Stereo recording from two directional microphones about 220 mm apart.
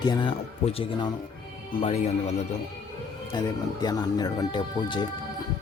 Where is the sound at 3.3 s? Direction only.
20° left (ahead or behind).